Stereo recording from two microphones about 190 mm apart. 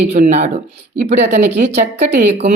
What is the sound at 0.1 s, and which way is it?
Speech, 35° right (ahead or behind).